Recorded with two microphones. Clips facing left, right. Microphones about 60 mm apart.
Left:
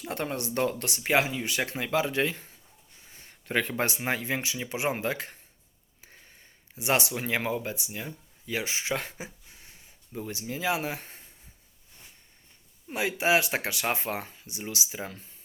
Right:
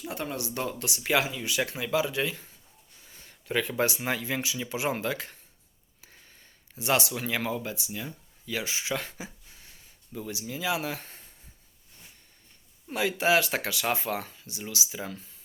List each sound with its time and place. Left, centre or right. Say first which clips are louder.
0.1 s speech: left 3 dB; left
3.0 s a sound: even; left
3.4 s speech: right 1 dB; left
12.9 s speech: right 1 dB; left